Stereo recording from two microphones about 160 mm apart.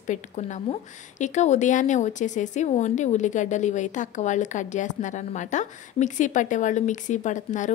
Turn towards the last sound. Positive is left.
turn(degrees=50)  # may be behind; listen again after turning